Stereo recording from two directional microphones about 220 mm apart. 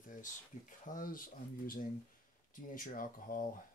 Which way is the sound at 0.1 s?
35° left (ahead or behind).